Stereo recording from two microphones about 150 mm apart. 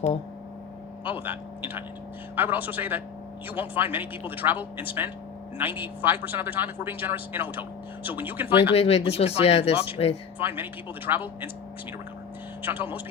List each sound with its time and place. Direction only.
1.0 s a man's voice: 15° right (ahead or behind)
8.7 s speech: 45° left (ahead or behind)
10.3 s a man's voice: 10° right (ahead or behind)
12.6 s a man's voice: 10° right (ahead or behind)